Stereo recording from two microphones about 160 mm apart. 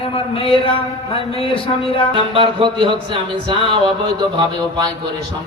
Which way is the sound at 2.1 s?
35° right (ahead or behind).